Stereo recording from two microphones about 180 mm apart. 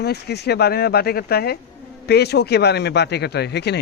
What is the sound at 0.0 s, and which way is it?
A man's voice, 65° left (ahead or behind).